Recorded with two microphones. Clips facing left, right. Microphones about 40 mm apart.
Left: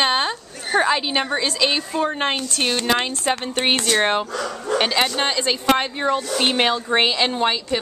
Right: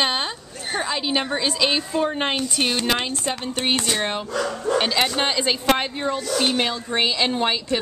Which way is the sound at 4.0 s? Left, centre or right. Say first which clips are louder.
Left 6 dB; left.